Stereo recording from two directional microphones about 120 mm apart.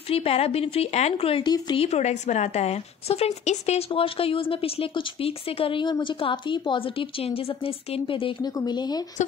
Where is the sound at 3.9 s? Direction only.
50° left (ahead or behind).